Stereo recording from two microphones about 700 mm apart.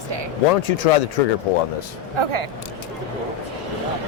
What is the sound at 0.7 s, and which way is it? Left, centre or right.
Speech, left.